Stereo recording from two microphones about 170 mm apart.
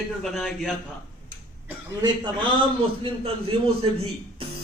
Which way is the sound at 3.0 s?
35° right (ahead or behind).